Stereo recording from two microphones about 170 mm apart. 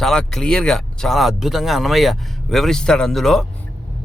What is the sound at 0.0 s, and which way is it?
Speech, centre (ahead or behind).